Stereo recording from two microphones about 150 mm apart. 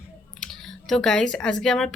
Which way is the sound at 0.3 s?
5° left (ahead or behind).